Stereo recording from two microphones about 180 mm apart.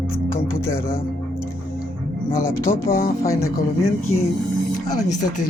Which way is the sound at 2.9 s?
50° left (ahead or behind).